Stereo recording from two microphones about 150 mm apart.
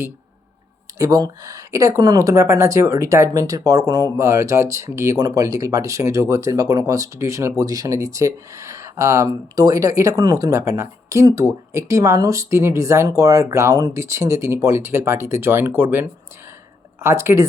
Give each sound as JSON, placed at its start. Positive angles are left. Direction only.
{"t": 0.9, "sound": "speech", "side_deg": -25}